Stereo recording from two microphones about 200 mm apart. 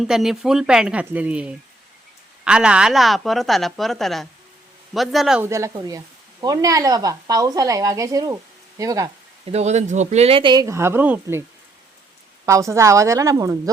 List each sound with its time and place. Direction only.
0.0 s a woman's voice: centre (ahead or behind)
5.5 s speech: 15° right (ahead or behind)
9.5 s speech: 35° right (ahead or behind); by 11.4 s 10° right (ahead or behind)
12.5 s speech: 15° right (ahead or behind)